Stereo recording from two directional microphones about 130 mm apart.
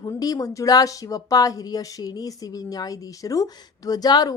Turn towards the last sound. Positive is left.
turn(degrees=30)  # may be behind; listen again after turning